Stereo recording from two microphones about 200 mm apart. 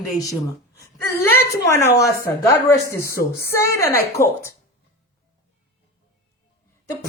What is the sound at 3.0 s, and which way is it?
Speech, 50° left (ahead or behind).